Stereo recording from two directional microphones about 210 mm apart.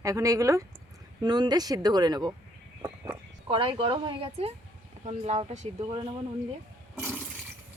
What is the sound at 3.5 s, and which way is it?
Speech, 25° right (ahead or behind).